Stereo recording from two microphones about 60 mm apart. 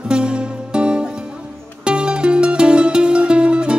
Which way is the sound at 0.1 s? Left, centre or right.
Centre.